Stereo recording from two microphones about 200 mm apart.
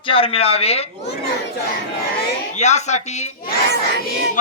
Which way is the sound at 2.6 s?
35° left (ahead or behind).